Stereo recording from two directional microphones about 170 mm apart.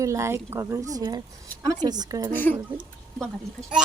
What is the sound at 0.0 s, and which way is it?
Speech, 20° right (ahead or behind).